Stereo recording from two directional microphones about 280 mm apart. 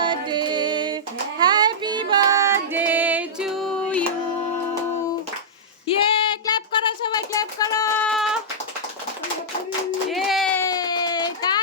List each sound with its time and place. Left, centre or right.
0.0 s music: centre
1.4 s female singing: centre
6.0 s child singing: centre
10.1 s a sound: centre